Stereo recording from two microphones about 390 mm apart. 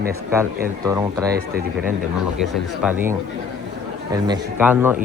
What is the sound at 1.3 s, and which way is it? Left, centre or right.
Speech, right.